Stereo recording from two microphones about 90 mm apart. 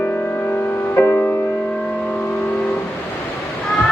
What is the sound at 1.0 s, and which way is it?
Music, 20° left (ahead or behind).